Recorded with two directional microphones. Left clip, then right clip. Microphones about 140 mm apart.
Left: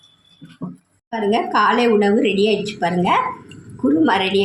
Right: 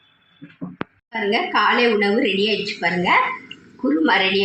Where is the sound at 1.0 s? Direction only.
20° left (ahead or behind).